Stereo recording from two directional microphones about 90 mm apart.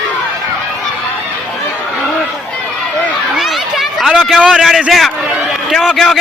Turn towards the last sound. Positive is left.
turn(degrees=0)  # may be behind; listen again after turning